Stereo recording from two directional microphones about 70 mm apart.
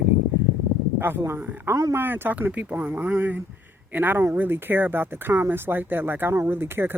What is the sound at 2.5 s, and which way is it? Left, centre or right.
Speech, centre.